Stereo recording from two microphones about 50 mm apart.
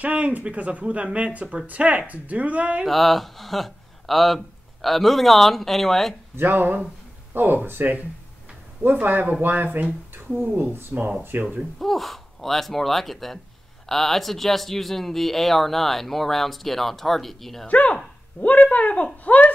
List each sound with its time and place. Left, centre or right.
0.0 s speech: right
2.9 s speech: centre
6.3 s speech: right
9.0 s speech: right
11.8 s speech: centre
17.6 s speech: left